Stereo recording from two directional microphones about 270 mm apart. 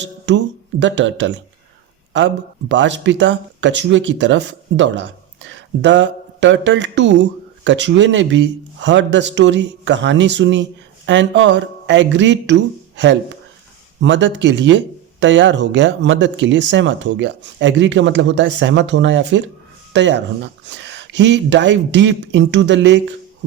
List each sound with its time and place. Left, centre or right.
0.0 s speech: right
14.0 s speech: right